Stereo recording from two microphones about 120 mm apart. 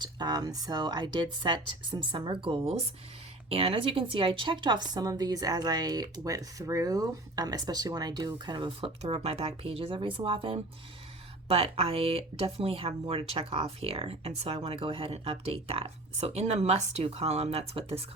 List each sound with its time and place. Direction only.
0.0 s a woman's voice: 35° right (ahead or behind)
9.0 s speech: 60° right (ahead or behind)